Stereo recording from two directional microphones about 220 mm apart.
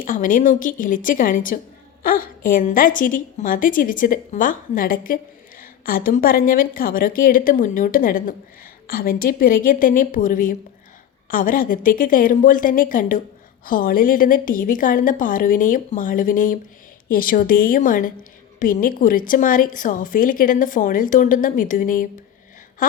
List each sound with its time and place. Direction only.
0.0 s a woman's voice: 35° left (ahead or behind)